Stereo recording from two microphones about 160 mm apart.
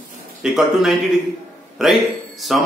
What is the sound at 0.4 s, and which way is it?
A man's voice, centre (ahead or behind).